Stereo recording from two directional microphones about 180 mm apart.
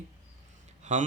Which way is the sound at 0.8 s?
40° right (ahead or behind).